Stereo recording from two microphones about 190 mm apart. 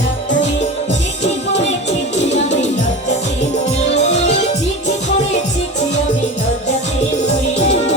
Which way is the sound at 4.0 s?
40° left (ahead or behind).